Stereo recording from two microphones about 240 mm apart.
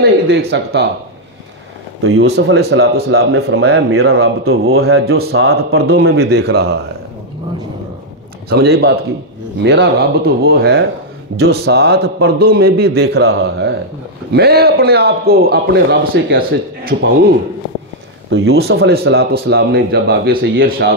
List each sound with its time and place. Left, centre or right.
0.0 s speech: right
2.0 s a man's voice: right
4.1 s a man's voice: right
5.8 s a man's voice: right
8.5 s a man's voice: right
18.3 s a man's voice: right